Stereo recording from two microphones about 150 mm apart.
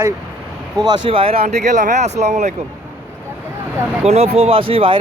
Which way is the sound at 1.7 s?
55° right (ahead or behind).